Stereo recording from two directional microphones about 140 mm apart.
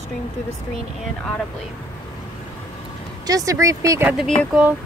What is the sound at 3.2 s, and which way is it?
Speech, 25° right (ahead or behind).